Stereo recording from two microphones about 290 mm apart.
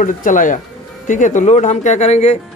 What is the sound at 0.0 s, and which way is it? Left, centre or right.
Speech, left.